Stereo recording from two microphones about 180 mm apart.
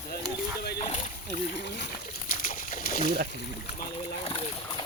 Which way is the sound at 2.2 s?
50° left (ahead or behind).